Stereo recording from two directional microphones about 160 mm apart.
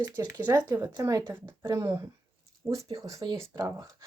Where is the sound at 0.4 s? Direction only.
15° right (ahead or behind).